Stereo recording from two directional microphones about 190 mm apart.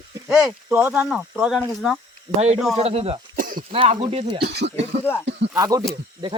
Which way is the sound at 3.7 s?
30° right (ahead or behind).